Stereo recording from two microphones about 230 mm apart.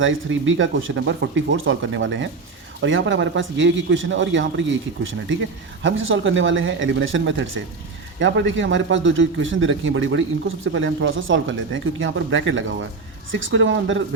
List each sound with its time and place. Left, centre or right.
0.0 s a man's voice: right